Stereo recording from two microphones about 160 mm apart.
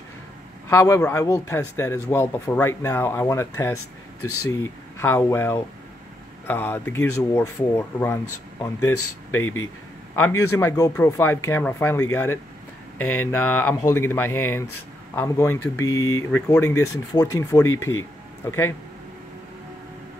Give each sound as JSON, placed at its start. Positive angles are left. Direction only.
{"t": 0.7, "sound": "speech", "side_deg": 15}